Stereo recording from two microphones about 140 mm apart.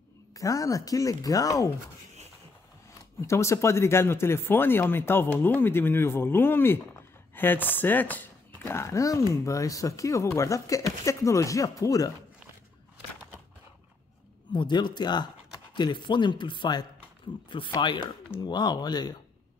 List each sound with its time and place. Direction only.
0.3 s speech: 25° left (ahead or behind)
3.2 s speech: 20° left (ahead or behind)
14.5 s speech: 30° left (ahead or behind)